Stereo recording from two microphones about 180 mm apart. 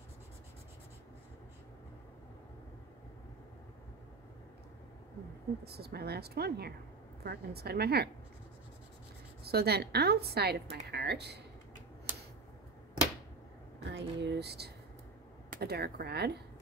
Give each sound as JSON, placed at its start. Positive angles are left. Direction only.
{"t": 5.7, "sound": "speech", "side_deg": -60}
{"t": 9.4, "sound": "a woman's voice", "side_deg": -60}
{"t": 13.8, "sound": "speech", "side_deg": -75}